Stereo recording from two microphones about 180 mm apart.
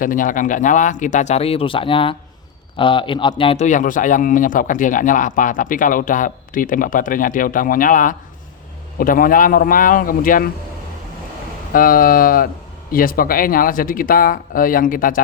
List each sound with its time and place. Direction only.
0.0 s a man's voice: 50° left (ahead or behind)
11.7 s a man's voice: 55° left (ahead or behind)